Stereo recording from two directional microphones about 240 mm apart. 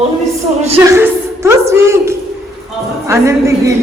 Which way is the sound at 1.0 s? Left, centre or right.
Centre.